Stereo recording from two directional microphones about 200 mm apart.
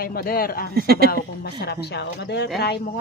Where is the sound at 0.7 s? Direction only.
50° right (ahead or behind).